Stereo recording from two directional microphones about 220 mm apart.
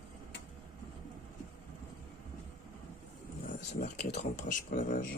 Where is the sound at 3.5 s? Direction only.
35° left (ahead or behind).